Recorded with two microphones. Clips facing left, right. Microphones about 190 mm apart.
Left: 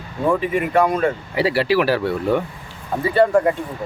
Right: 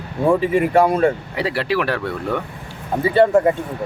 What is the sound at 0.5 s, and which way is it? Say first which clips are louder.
Speech: right 3 dB; 25° right (ahead or behind).